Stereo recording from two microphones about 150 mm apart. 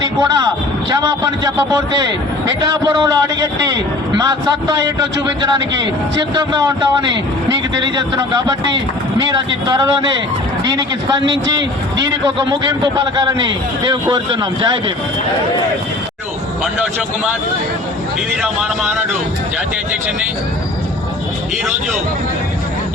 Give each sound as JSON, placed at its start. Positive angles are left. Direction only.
{"t": 0.0, "sound": "a man's voice", "side_deg": -25}
{"t": 6.3, "sound": "a man's voice", "side_deg": -25}
{"t": 9.1, "sound": "a man's voice", "side_deg": -25}
{"t": 16.7, "sound": "a man's voice", "side_deg": -10}
{"t": 18.4, "sound": "a man's voice", "side_deg": -10}